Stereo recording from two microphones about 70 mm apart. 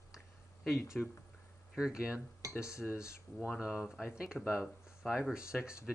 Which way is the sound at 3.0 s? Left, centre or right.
Left.